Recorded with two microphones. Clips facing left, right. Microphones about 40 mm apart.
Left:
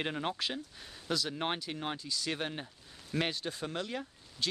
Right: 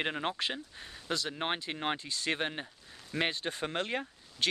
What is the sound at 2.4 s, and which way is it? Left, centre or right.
Speech, right.